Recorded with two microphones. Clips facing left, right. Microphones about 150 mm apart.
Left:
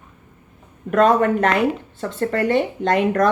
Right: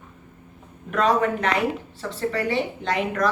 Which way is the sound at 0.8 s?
50° left (ahead or behind).